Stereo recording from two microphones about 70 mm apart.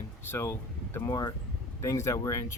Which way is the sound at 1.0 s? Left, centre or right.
Left.